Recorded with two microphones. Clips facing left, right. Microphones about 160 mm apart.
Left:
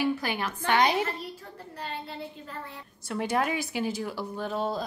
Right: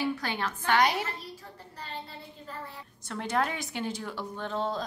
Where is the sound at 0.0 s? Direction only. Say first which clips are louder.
Left 3 dB; 10° left (ahead or behind).